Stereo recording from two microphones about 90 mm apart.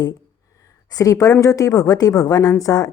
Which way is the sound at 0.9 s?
40° left (ahead or behind).